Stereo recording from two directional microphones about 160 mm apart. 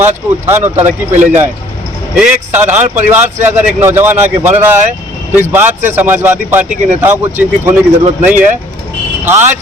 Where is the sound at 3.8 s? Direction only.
15° right (ahead or behind).